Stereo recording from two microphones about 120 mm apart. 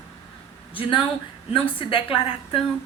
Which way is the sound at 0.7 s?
45° left (ahead or behind).